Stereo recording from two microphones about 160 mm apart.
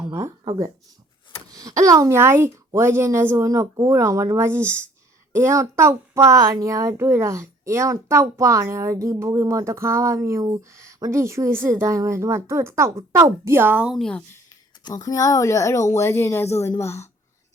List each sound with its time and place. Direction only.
1.5 s a child's voice: 20° right (ahead or behind)
13.9 s speech: 5° left (ahead or behind)
14.8 s a woman's voice: 20° left (ahead or behind)